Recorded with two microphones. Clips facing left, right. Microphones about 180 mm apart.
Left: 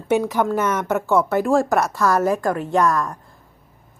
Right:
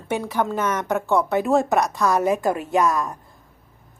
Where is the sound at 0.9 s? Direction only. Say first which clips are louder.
Left 2 dB; centre (ahead or behind).